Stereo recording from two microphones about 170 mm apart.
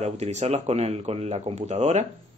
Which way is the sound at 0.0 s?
40° right (ahead or behind).